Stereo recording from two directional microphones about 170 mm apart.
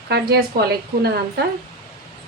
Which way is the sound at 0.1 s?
65° right (ahead or behind).